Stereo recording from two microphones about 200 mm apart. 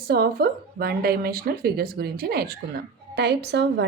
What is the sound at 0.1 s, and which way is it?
A woman's voice, 50° right (ahead or behind).